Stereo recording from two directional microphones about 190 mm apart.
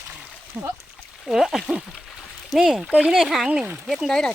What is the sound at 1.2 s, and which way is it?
Speech, centre (ahead or behind).